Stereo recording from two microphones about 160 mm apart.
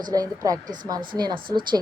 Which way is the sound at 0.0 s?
25° right (ahead or behind).